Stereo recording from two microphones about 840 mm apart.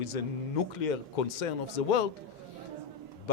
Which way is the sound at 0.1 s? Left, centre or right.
Left.